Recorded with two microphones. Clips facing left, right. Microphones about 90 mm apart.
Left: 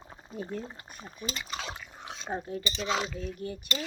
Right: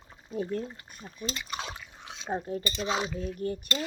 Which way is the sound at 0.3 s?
25° left (ahead or behind).